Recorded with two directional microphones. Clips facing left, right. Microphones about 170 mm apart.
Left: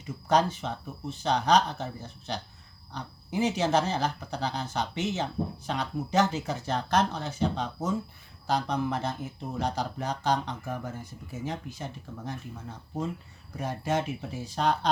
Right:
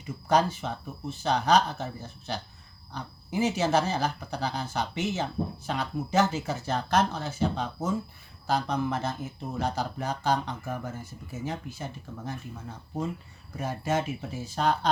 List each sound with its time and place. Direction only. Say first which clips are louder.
0.0 s speech: even; 10° right (ahead or behind)
13.6 s speech: right 1 dB; 5° right (ahead or behind)